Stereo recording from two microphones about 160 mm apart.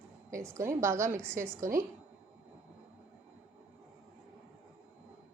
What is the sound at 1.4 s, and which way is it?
Speech, 60° right (ahead or behind).